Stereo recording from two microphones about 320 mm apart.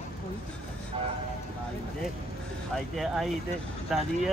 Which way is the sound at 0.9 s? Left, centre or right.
Centre.